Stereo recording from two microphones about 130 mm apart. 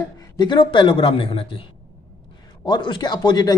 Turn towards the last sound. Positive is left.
turn(degrees=30)  # may be behind; listen again after turning